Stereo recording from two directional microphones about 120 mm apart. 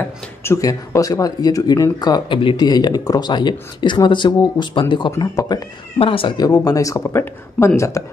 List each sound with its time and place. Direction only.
0.4 s speech: 25° left (ahead or behind); by 5.1 s 40° left (ahead or behind)
5.3 s speech: 30° left (ahead or behind)
5.9 s speech: 50° left (ahead or behind)
6.4 s speech: 30° left (ahead or behind)